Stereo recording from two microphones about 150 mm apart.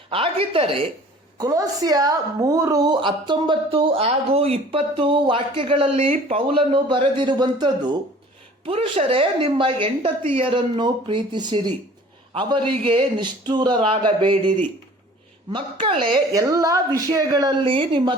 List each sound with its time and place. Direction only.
0.1 s a woman's voice: 40° right (ahead or behind)
1.4 s a woman's voice: 25° right (ahead or behind)
8.6 s a woman's voice: 40° right (ahead or behind)
15.5 s a woman's voice: 35° right (ahead or behind)
16.1 s speech: 25° right (ahead or behind)